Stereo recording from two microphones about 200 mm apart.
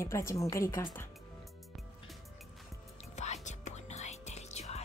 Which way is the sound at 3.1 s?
35° left (ahead or behind).